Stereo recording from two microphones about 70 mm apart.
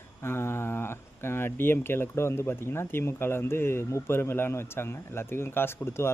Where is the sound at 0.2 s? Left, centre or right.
Left.